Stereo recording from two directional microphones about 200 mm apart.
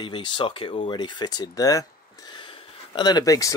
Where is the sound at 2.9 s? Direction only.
20° left (ahead or behind).